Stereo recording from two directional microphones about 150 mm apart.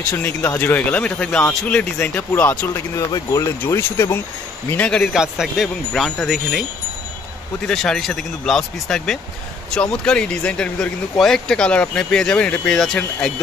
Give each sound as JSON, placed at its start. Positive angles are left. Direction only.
{"t": 0.1, "sound": "speech", "side_deg": 10}
{"t": 3.1, "sound": "speech", "side_deg": 25}
{"t": 7.6, "sound": "speech", "side_deg": 5}